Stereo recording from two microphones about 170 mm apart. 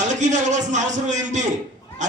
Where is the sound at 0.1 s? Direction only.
45° right (ahead or behind).